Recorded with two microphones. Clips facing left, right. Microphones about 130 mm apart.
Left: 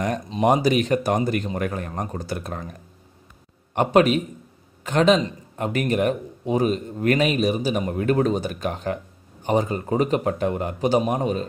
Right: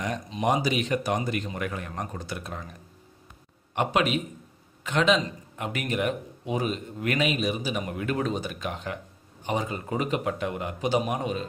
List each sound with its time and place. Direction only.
0.4 s speech: 50° left (ahead or behind)
3.7 s a man's voice: 40° left (ahead or behind)